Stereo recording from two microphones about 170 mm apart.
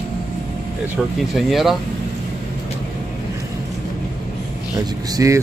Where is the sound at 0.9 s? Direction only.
Centre (ahead or behind).